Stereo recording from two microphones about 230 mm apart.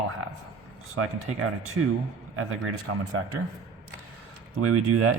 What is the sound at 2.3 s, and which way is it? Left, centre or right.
Speech, right.